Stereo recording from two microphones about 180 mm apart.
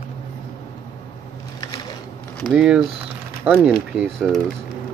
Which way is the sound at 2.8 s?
30° right (ahead or behind).